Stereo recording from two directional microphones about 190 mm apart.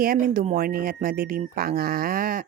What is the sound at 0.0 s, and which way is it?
Speech, 50° right (ahead or behind).